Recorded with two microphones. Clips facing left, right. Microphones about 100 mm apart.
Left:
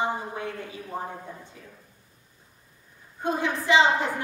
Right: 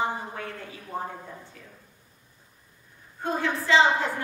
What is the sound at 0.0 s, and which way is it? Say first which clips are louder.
Speech: left 1 dB; 20° left (ahead or behind).